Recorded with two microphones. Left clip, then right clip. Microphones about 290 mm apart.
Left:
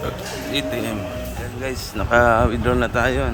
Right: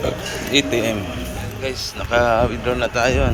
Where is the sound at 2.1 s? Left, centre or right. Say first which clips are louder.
Left 1 dB; centre.